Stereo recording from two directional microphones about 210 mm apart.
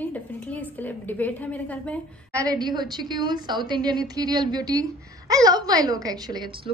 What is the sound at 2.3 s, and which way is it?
A woman's voice, 20° right (ahead or behind).